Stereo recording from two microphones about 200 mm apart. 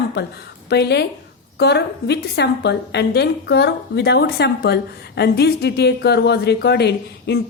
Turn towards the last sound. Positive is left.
turn(degrees=55)  # may be behind; listen again after turning